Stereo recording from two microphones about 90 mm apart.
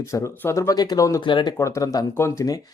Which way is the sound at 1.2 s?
55° left (ahead or behind).